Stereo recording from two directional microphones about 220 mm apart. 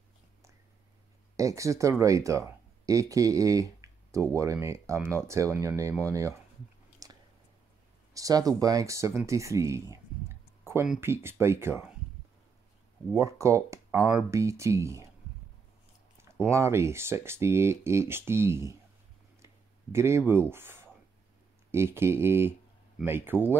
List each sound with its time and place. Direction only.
1.3 s speech: 15° right (ahead or behind)
7.0 s chewing: 15° right (ahead or behind)
8.1 s speech: 15° right (ahead or behind)
13.1 s speech: 15° right (ahead or behind)
16.3 s speech: 10° right (ahead or behind)
19.4 s a sound: 10° right (ahead or behind)
21.6 s speech: 10° right (ahead or behind)